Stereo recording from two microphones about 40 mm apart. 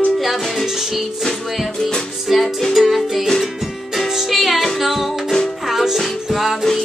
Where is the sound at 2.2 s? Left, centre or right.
Centre.